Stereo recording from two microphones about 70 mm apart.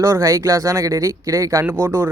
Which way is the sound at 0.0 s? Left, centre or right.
Right.